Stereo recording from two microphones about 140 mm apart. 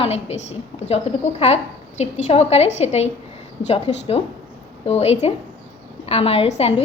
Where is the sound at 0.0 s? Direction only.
50° left (ahead or behind).